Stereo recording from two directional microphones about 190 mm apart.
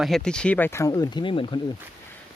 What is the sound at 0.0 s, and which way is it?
Speech, 5° left (ahead or behind).